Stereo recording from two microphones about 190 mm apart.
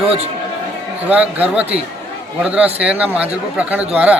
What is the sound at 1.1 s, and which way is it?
A man's voice, 10° right (ahead or behind).